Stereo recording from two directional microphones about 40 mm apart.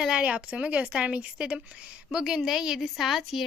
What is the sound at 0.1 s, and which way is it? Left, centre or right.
A woman's voice, right.